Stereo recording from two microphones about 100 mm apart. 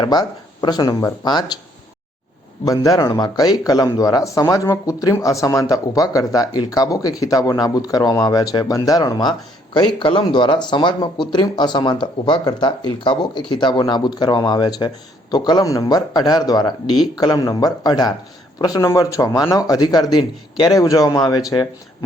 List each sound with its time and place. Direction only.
0.0 s speech: 45° left (ahead or behind)
2.6 s speech: 35° left (ahead or behind)